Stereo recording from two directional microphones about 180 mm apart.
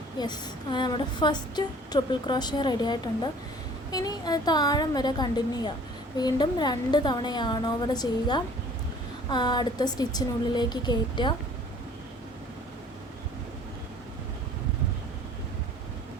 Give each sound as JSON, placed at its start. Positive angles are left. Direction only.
{"t": 0.2, "sound": "speech", "side_deg": 25}